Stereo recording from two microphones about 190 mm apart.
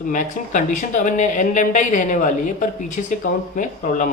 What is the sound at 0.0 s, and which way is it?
A woman's voice, 45° left (ahead or behind).